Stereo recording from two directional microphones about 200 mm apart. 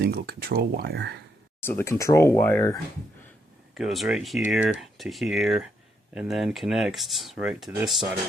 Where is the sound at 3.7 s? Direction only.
Centre (ahead or behind).